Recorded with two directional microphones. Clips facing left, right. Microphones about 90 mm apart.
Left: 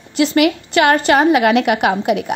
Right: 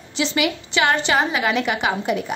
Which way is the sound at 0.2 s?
55° left (ahead or behind).